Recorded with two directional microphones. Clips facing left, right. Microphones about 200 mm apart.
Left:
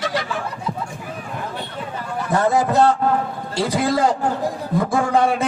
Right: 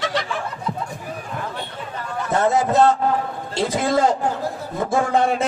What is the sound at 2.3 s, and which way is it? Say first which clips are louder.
A man's voice: even; 25° right (ahead or behind).